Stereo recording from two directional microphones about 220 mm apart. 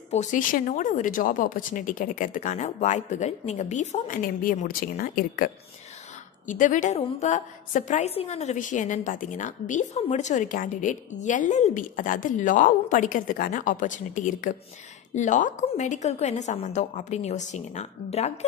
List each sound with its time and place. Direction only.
0.1 s a woman's voice: 35° left (ahead or behind)